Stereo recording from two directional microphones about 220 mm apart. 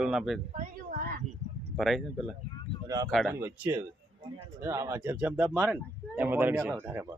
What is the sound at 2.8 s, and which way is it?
Speech, 15° right (ahead or behind).